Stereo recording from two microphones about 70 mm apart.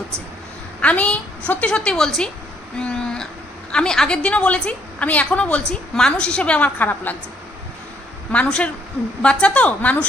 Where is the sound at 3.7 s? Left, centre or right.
Centre.